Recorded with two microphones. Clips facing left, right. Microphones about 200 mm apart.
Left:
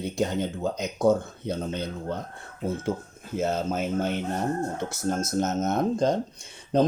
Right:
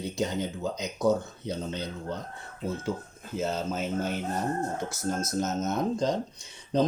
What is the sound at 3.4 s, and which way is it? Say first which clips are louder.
Speech: left 4 dB; 55° left (ahead or behind).